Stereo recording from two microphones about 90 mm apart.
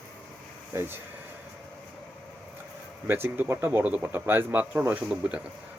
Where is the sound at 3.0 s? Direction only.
25° right (ahead or behind).